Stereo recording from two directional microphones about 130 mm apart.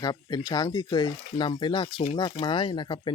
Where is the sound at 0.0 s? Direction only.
30° left (ahead or behind).